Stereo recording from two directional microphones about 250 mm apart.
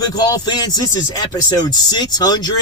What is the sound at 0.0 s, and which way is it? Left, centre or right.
Speech, centre.